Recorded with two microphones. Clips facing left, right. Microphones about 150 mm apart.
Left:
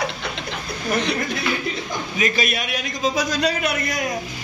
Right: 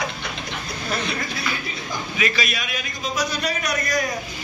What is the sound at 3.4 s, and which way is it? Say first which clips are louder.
Speech: left 3 dB; 25° left (ahead or behind).